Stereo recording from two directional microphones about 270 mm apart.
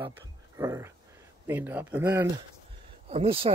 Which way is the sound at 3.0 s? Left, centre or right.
Right.